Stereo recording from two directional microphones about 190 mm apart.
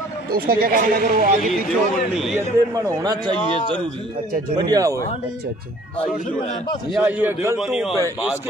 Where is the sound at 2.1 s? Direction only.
Centre (ahead or behind).